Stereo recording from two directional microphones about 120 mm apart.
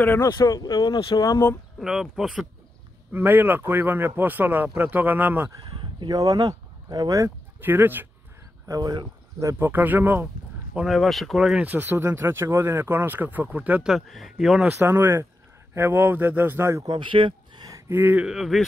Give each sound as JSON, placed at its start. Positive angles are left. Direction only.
{"t": 0.2, "sound": "speech", "side_deg": 30}
{"t": 1.1, "sound": "speech", "side_deg": 30}
{"t": 1.8, "sound": "speech", "side_deg": -5}
{"t": 3.1, "sound": "speech", "side_deg": -15}
{"t": 5.6, "sound": "speech", "side_deg": -40}
{"t": 8.6, "sound": "speech", "side_deg": -30}
{"t": 10.7, "sound": "speech", "side_deg": -5}
{"t": 14.8, "sound": "speech", "side_deg": -20}
{"t": 16.8, "sound": "speech", "side_deg": -40}
{"t": 17.6, "sound": "gasp", "side_deg": -30}
{"t": 17.9, "sound": "speech", "side_deg": -15}